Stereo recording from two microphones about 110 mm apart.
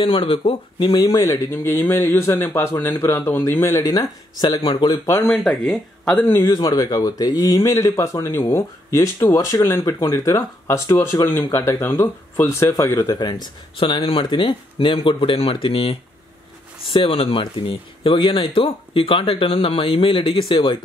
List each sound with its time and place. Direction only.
0.0 s speech: 50° left (ahead or behind)
0.9 s speech: 35° left (ahead or behind)
1.5 s speech: 20° left (ahead or behind)
3.8 s speech: 35° left (ahead or behind)
5.2 s speech: 5° left (ahead or behind)
6.4 s speech: 45° left (ahead or behind)
13.3 s speech: 50° left (ahead or behind)